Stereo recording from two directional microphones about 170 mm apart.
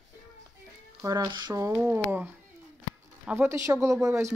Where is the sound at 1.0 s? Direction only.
25° right (ahead or behind).